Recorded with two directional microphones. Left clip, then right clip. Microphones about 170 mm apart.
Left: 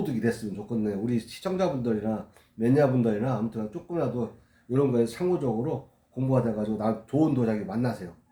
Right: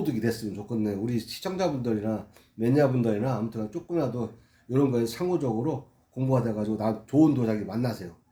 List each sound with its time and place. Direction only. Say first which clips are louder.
0.0 s speech: even; 30° right (ahead or behind)